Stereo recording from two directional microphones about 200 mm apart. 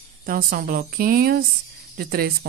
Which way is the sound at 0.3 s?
45° right (ahead or behind).